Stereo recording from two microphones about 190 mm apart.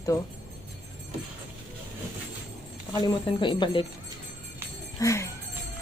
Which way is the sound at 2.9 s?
20° left (ahead or behind).